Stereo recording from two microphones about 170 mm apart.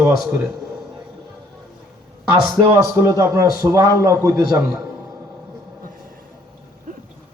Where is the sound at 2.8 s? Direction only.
15° right (ahead or behind).